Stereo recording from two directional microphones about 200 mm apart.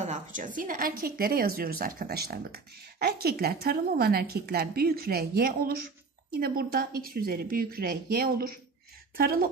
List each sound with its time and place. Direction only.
0.0 s a woman's voice: 40° right (ahead or behind)